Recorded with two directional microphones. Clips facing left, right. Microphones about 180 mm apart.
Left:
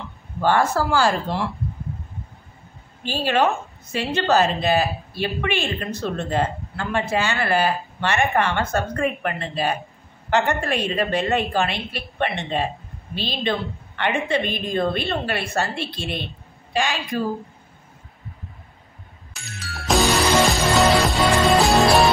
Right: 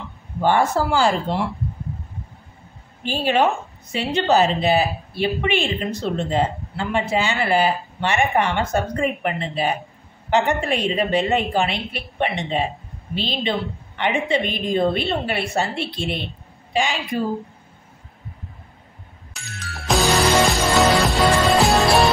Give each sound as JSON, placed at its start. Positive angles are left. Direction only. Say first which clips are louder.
{"t": 0.4, "sound": "a woman's voice", "louder": "right 1 dB", "side_deg": -20}
{"t": 3.3, "sound": "a woman's voice", "louder": "right 1 dB", "side_deg": -15}
{"t": 19.4, "sound": "music", "louder": "even", "side_deg": 0}